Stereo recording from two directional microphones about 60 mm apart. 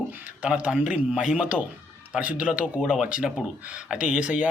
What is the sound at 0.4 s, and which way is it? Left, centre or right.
Speech, right.